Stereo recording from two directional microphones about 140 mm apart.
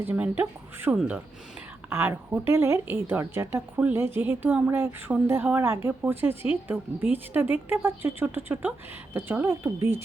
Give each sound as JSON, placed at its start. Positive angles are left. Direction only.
{"t": 0.0, "sound": "a woman's voice", "side_deg": -15}